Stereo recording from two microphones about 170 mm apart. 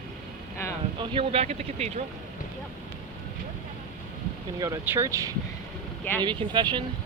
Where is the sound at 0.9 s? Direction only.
35° right (ahead or behind).